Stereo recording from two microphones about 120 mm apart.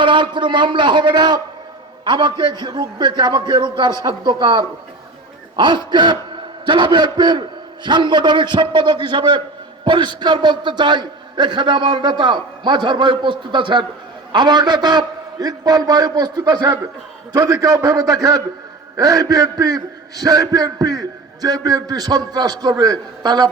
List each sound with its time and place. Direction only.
0.0 s a man's voice: 40° right (ahead or behind)